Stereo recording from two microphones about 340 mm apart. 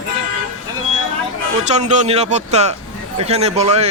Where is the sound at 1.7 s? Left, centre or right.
Centre.